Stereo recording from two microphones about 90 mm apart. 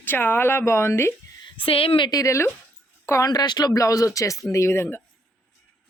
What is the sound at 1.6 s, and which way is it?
Speech, 90° left.